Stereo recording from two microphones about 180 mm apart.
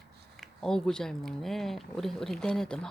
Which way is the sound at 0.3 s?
5° left (ahead or behind).